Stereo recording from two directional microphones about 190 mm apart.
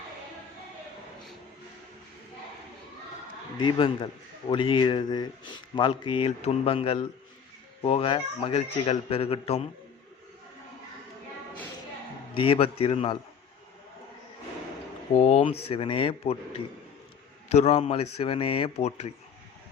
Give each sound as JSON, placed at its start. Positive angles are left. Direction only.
{"t": 3.6, "sound": "a man's voice", "side_deg": 25}
{"t": 12.3, "sound": "a man's voice", "side_deg": 30}
{"t": 15.2, "sound": "a man's voice", "side_deg": 35}
{"t": 17.5, "sound": "speech", "side_deg": 35}